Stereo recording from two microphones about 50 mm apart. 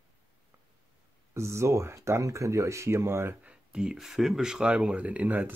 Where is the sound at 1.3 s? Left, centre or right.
Right.